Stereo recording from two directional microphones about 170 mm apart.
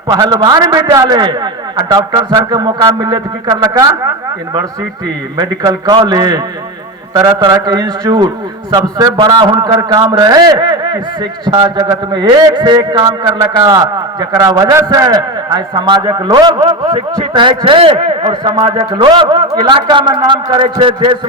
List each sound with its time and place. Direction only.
0.1 s a man's voice: 25° right (ahead or behind)
5.4 s a man's voice: 25° right (ahead or behind)